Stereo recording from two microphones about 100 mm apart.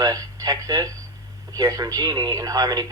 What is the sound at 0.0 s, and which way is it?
A man's voice, 35° right (ahead or behind).